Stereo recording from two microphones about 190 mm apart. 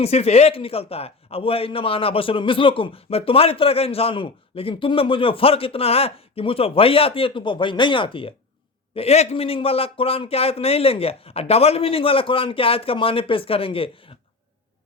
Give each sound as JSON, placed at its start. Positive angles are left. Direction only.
{"t": 0.0, "sound": "a man's voice", "side_deg": 35}